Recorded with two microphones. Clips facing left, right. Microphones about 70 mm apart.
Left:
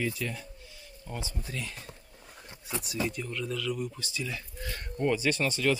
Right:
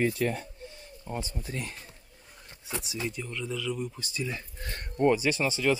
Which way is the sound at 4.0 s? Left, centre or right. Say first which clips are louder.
Right 2 dB; right.